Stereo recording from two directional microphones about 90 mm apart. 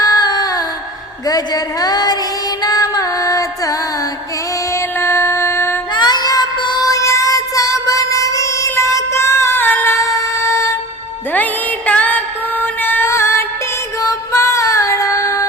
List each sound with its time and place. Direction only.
0.0 s music: 50° left (ahead or behind)
1.3 s a sound: 45° left (ahead or behind)
2.6 s music: 45° left (ahead or behind)
4.7 s music: 30° left (ahead or behind)
5.9 s music: 50° left (ahead or behind); by 8.7 s 35° left (ahead or behind)
8.7 s child singing: 35° left (ahead or behind)
10.0 s music: 35° left (ahead or behind)
11.9 s music: 15° left (ahead or behind)
14.0 s female singing: 35° left (ahead or behind)